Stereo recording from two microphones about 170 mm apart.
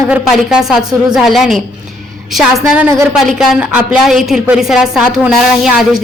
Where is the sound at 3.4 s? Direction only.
5° right (ahead or behind).